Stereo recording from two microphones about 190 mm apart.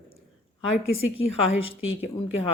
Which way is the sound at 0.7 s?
30° left (ahead or behind).